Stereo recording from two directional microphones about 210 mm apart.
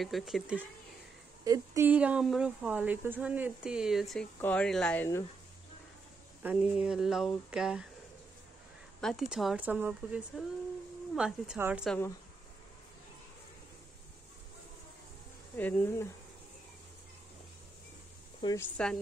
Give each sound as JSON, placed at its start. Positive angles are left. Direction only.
{"t": 0.0, "sound": "speech", "side_deg": 0}
{"t": 1.4, "sound": "speech", "side_deg": -15}
{"t": 6.4, "sound": "speech", "side_deg": -5}
{"t": 9.0, "sound": "speech", "side_deg": 0}
{"t": 15.5, "sound": "speech", "side_deg": 10}
{"t": 18.4, "sound": "speech", "side_deg": 15}